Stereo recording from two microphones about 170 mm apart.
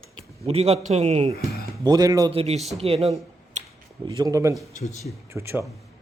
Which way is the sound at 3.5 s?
45° right (ahead or behind).